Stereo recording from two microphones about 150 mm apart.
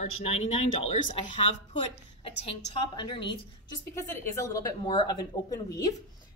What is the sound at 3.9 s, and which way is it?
Speech, 20° left (ahead or behind).